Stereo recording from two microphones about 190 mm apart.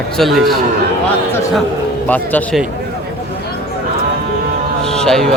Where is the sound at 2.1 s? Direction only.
10° left (ahead or behind).